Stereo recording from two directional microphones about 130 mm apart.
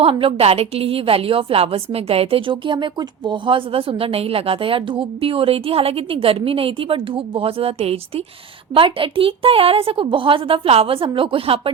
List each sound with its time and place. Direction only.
0.0 s a woman's voice: 45° right (ahead or behind)